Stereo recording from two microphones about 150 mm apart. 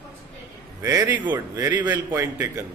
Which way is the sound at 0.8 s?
25° right (ahead or behind).